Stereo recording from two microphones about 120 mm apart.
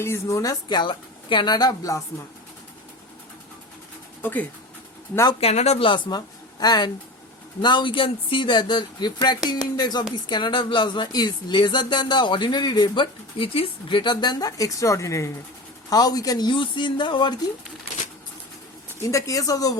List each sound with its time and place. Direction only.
0.0 s speech: 25° left (ahead or behind)
4.2 s speech: 15° left (ahead or behind)
5.4 s speech: 60° left (ahead or behind)
5.9 s speech: 35° left (ahead or behind)
19.0 s speech: 25° left (ahead or behind)